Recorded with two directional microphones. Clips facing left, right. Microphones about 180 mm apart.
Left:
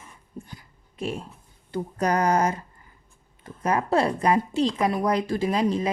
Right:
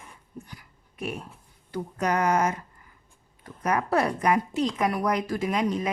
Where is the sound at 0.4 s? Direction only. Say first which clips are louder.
Left 2 dB; 25° left (ahead or behind).